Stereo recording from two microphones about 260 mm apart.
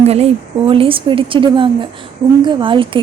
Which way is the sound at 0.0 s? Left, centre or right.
Right.